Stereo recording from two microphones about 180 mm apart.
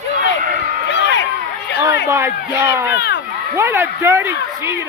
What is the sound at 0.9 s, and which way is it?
Speech, 90° left.